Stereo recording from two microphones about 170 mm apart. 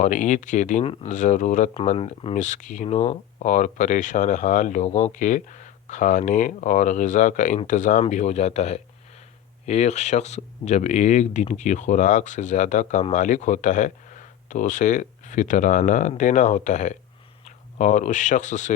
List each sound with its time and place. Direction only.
0.0 s speech: 45° left (ahead or behind)
1.7 s speech: 35° left (ahead or behind)